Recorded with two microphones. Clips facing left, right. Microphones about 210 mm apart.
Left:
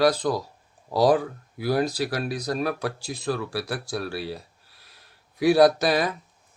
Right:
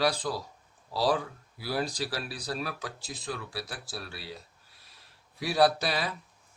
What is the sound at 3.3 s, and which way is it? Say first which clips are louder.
Speech: left 9 dB; 65° left (ahead or behind).